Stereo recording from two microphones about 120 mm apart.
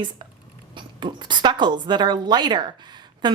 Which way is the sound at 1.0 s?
40° right (ahead or behind).